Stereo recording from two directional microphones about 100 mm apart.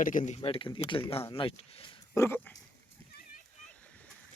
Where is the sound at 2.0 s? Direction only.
30° left (ahead or behind).